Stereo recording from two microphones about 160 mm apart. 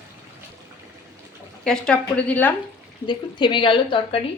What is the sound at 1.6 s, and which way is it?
Cutlery, 5° left (ahead or behind).